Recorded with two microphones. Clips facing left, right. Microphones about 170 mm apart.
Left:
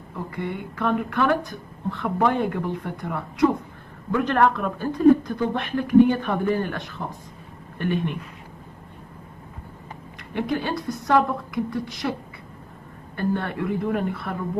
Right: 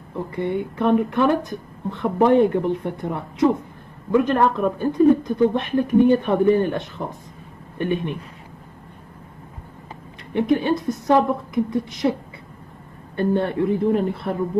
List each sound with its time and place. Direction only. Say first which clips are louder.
0.4 s speech: right 6 dB; 25° right (ahead or behind)
7.8 s speech: right 2 dB; 20° right (ahead or behind)
10.3 s speech: right 6 dB; 20° right (ahead or behind)
13.1 s speech: right 5 dB; 25° right (ahead or behind)